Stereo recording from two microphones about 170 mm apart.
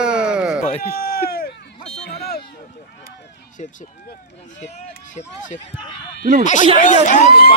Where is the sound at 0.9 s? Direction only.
60° left (ahead or behind).